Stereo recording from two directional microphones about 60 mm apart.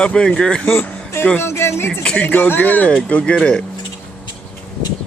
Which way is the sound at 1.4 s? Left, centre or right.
Left.